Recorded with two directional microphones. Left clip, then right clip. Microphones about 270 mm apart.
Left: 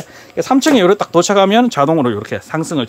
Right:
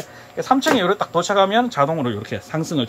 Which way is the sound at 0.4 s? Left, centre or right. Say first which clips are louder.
Left 5 dB; left.